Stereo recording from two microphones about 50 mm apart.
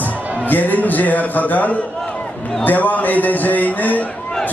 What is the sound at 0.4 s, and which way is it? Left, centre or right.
A man's voice, left.